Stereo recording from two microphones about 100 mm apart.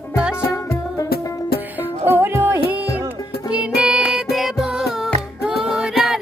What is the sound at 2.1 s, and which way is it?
Music, 20° right (ahead or behind).